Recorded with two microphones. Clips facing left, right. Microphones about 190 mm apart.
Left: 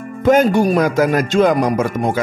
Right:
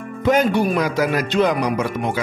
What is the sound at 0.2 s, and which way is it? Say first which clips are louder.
Speech: left 4 dB; 45° left (ahead or behind).